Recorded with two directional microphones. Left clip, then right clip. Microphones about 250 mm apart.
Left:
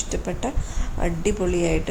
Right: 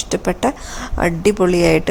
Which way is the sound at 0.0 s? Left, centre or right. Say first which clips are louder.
Right 10 dB; centre.